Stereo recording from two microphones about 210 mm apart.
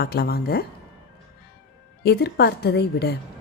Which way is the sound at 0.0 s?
50° left (ahead or behind).